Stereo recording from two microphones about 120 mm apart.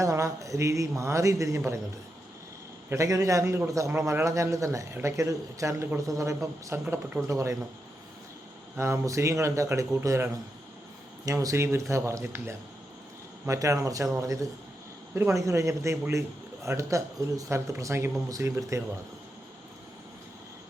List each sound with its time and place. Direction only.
0.0 s a man's voice: 25° right (ahead or behind)
2.9 s a man's voice: 25° right (ahead or behind)
8.8 s a man's voice: 25° right (ahead or behind)